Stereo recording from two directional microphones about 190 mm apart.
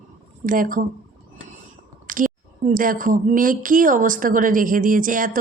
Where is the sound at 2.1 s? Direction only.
45° right (ahead or behind).